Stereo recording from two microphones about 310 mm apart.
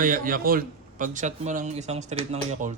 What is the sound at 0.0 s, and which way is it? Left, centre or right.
A man's voice, right.